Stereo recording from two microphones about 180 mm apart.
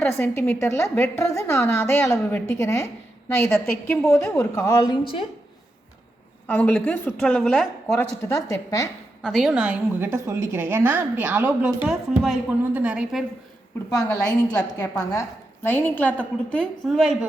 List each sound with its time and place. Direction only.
0.1 s a woman's voice: 15° left (ahead or behind)
6.5 s a woman's voice: 10° left (ahead or behind)
8.3 s a woman's voice: 20° left (ahead or behind)
9.2 s a woman's voice: centre (ahead or behind)
13.9 s a woman's voice: 20° left (ahead or behind); by 17.2 s centre (ahead or behind)